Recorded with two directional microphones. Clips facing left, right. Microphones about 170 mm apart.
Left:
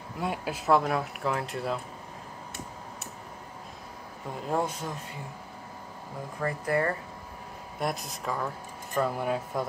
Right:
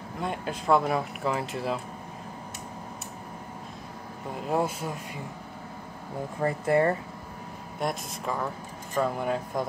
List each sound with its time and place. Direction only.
0.2 s speech: 5° left (ahead or behind)
4.5 s speech: 5° right (ahead or behind)
6.4 s speech: 25° right (ahead or behind)
7.8 s speech: centre (ahead or behind)